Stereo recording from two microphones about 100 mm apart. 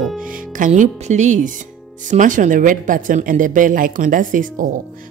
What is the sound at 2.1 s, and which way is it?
Speech, 90° right.